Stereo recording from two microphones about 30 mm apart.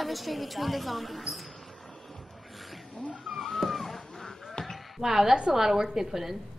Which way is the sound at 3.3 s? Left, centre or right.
Centre.